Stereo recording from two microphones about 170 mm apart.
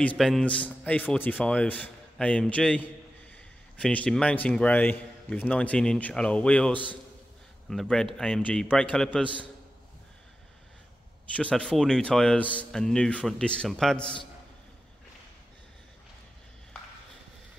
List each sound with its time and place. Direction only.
0.0 s a man's voice: 5° left (ahead or behind)
11.3 s speech: 5° left (ahead or behind)